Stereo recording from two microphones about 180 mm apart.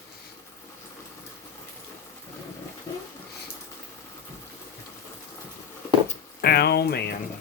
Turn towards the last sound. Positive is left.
turn(degrees=65)  # may be behind; listen again after turning